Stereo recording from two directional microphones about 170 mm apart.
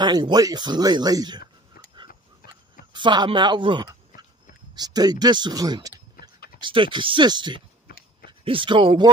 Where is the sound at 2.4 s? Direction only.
60° left (ahead or behind).